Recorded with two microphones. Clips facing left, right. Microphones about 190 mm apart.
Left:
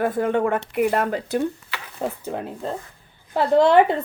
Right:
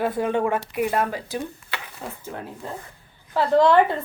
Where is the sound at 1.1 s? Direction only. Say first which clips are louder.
Left 6 dB; 60° left (ahead or behind).